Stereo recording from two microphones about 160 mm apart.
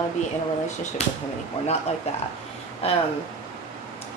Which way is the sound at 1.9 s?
40° left (ahead or behind).